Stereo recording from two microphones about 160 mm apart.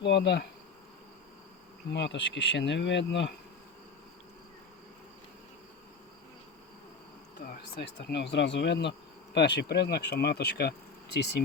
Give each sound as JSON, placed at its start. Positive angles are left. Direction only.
{"t": 0.0, "sound": "speech", "side_deg": 90}
{"t": 1.9, "sound": "speech", "side_deg": 90}
{"t": 7.4, "sound": "speech", "side_deg": 85}